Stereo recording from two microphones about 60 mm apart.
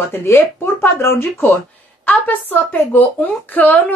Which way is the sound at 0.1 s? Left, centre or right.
Left.